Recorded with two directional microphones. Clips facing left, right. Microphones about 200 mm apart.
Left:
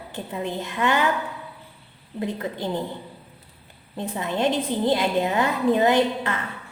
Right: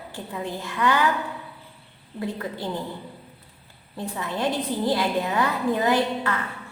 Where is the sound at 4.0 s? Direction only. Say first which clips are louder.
Left 3 dB; 20° left (ahead or behind).